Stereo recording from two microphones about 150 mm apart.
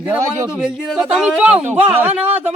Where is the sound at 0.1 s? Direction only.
5° right (ahead or behind).